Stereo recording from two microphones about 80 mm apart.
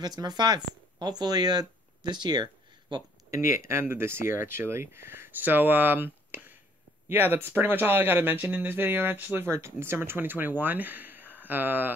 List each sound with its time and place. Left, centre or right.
0.0 s speech: right
3.3 s speech: right